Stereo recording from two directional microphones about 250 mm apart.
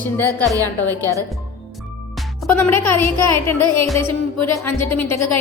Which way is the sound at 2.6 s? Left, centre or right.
Left.